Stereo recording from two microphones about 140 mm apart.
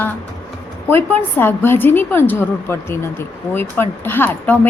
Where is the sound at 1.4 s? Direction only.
15° left (ahead or behind).